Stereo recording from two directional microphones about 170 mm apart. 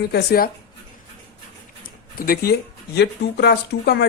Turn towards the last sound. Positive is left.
turn(degrees=75)  # may be behind; listen again after turning